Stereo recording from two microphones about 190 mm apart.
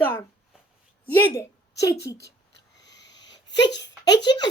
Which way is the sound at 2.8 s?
65° left (ahead or behind).